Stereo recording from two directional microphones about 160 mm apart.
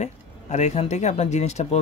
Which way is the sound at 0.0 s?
45° left (ahead or behind).